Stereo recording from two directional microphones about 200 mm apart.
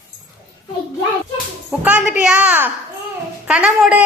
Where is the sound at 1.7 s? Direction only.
5° right (ahead or behind).